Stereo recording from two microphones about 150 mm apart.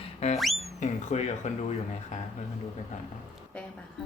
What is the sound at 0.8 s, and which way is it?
Speech, 50° left (ahead or behind).